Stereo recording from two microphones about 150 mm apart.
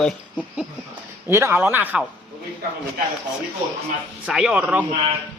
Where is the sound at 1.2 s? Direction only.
15° right (ahead or behind).